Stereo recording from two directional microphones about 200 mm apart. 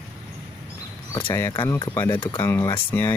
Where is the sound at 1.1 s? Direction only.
15° left (ahead or behind).